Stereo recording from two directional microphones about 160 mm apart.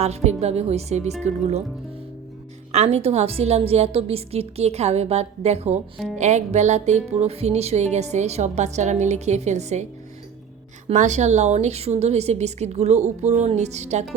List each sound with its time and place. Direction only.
0.0 s a woman's voice: 40° right (ahead or behind)
1.2 s music: 40° right (ahead or behind)
2.7 s a woman's voice: 40° right (ahead or behind)
6.1 s music: 45° right (ahead or behind)
10.8 s music: 50° right (ahead or behind)